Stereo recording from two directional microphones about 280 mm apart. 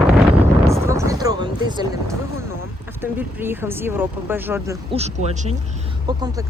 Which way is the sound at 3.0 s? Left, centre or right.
Centre.